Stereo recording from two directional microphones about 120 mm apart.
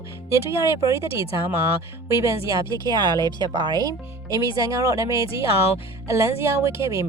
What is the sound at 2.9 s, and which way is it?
Speech, 35° right (ahead or behind).